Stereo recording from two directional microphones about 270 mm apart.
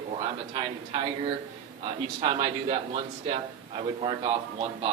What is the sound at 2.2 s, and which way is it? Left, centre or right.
A man's voice, right.